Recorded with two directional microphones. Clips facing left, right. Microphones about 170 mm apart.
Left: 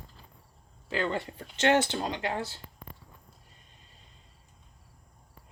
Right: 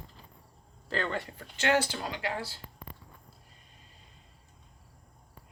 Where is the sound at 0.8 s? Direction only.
10° left (ahead or behind).